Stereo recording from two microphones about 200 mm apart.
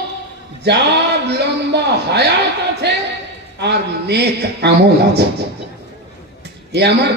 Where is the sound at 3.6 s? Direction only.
55° right (ahead or behind).